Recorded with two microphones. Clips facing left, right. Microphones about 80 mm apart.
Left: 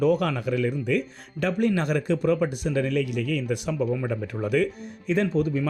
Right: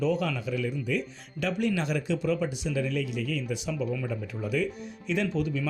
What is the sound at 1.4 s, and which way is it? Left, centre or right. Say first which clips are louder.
Speech: left 4 dB; left.